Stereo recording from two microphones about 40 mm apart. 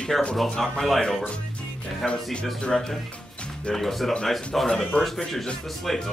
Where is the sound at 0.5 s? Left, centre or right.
Centre.